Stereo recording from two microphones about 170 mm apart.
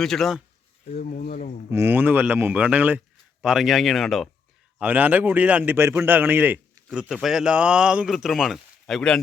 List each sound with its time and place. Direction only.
0.0 s speech: centre (ahead or behind)
0.9 s speech: 60° left (ahead or behind)
1.7 s a man's voice: 15° right (ahead or behind)
4.8 s a man's voice: 10° right (ahead or behind)